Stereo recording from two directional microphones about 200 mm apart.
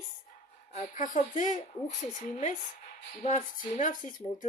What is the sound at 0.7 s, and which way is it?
Speech, 40° left (ahead or behind).